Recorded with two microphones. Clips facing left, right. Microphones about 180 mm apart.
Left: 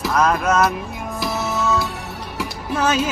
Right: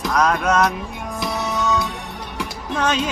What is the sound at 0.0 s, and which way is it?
Music, 5° left (ahead or behind).